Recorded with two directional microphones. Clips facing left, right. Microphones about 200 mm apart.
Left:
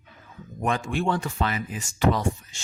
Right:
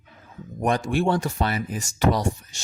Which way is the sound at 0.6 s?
40° right (ahead or behind).